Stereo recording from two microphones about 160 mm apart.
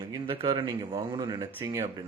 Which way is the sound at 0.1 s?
25° right (ahead or behind).